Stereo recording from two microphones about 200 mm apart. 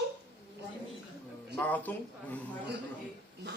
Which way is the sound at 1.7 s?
10° left (ahead or behind).